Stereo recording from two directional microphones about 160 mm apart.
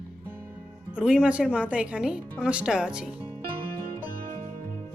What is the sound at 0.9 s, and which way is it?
Speech, 5° right (ahead or behind).